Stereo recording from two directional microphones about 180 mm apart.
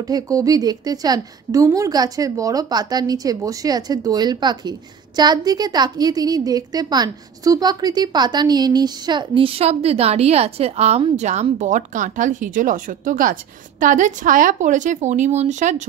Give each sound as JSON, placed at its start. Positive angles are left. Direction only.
{"t": 0.0, "sound": "a woman's voice", "side_deg": -20}